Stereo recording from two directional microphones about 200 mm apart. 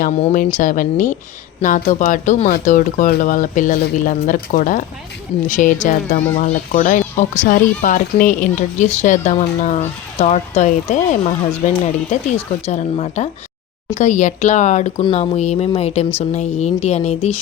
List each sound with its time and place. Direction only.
0.0 s speech: 35° left (ahead or behind)